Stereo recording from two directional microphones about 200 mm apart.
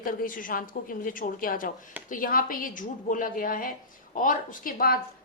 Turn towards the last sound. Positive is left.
turn(degrees=45)  # may be behind; listen again after turning